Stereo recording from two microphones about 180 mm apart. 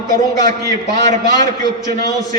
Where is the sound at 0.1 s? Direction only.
20° left (ahead or behind).